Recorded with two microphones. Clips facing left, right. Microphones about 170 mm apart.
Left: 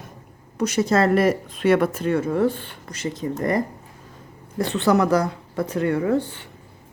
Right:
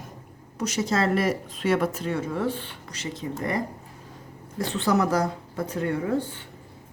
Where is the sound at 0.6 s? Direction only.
55° left (ahead or behind).